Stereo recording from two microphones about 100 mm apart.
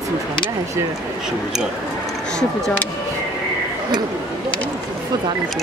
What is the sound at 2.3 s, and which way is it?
Speech, 10° left (ahead or behind).